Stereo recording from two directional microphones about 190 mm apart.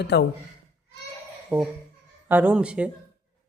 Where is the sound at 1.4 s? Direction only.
5° right (ahead or behind).